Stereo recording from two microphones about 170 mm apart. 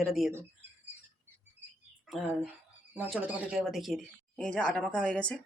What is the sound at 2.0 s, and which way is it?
Speech, centre (ahead or behind).